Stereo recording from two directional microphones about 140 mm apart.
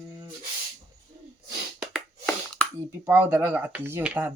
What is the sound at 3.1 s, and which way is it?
Speech, 15° right (ahead or behind).